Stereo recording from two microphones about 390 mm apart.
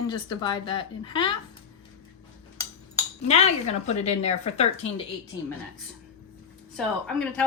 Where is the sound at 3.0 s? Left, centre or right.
Centre.